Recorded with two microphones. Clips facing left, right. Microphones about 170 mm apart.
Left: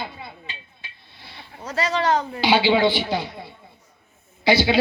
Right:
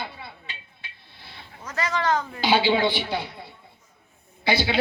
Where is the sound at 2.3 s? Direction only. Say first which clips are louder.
Left 1 dB; 50° right (ahead or behind).